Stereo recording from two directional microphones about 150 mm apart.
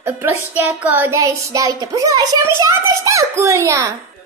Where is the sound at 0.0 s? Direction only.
15° right (ahead or behind).